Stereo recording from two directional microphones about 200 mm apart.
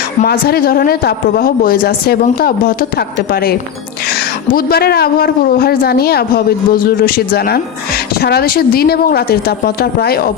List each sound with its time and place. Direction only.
0.2 s a woman's voice: 50° left (ahead or behind)